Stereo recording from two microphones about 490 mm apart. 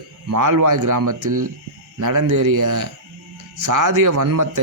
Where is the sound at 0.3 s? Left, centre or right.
Right.